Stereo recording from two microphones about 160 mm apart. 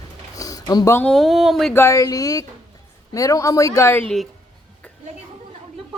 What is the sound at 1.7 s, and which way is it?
Speech, 20° left (ahead or behind).